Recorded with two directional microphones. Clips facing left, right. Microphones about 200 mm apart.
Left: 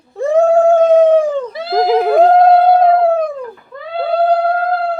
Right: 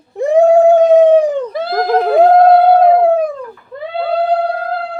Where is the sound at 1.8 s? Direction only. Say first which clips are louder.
Even; 5° left (ahead or behind).